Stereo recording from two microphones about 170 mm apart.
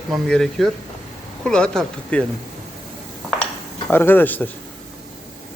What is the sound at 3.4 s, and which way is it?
Cutlery, 10° left (ahead or behind).